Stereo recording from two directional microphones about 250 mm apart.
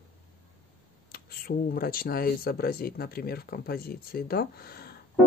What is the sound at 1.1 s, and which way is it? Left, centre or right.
Speech, left.